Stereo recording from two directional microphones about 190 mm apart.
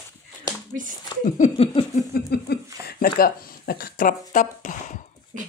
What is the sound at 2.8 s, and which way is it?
Speech, 50° left (ahead or behind).